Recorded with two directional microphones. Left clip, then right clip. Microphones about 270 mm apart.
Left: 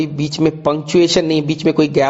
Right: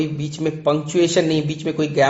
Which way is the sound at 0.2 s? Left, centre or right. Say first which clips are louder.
Left 7 dB; left.